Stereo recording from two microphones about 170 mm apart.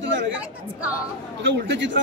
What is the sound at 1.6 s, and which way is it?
Speech, 90° right.